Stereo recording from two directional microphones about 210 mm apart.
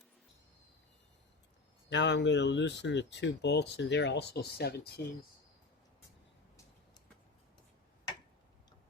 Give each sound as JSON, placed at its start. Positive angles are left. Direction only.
{"t": 1.9, "sound": "speech", "side_deg": 55}